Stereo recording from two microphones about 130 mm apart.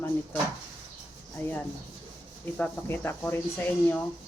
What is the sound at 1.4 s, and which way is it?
Speech, 15° left (ahead or behind).